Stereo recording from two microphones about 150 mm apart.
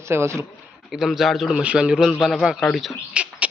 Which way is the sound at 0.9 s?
Centre (ahead or behind).